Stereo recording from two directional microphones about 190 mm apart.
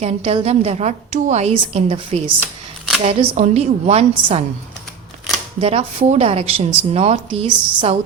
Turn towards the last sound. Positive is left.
turn(degrees=-30)  # may be behind; listen again after turning